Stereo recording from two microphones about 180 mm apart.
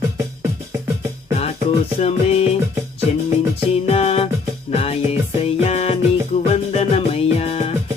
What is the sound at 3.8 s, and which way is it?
Music, 35° left (ahead or behind).